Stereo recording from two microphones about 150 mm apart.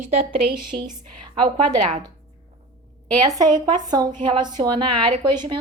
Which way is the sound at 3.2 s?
30° right (ahead or behind).